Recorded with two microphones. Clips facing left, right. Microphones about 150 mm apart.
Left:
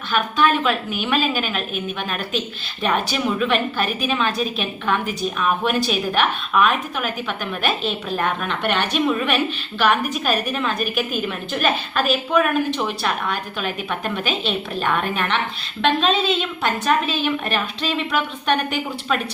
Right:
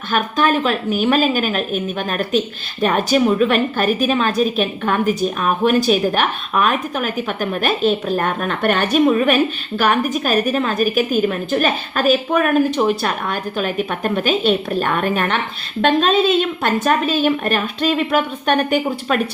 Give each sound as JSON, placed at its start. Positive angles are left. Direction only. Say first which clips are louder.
{"t": 0.1, "sound": "a woman's voice", "louder": "right 2 dB", "side_deg": -45}